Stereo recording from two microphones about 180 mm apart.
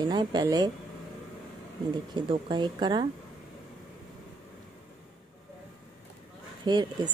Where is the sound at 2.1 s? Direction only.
25° right (ahead or behind).